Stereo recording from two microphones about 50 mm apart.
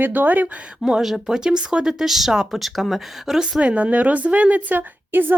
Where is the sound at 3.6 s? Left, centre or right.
Right.